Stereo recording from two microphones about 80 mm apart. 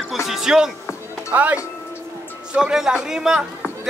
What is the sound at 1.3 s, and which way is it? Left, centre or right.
Speech, centre.